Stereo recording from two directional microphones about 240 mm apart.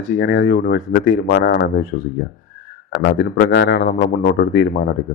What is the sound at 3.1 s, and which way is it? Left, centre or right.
A man's voice, left.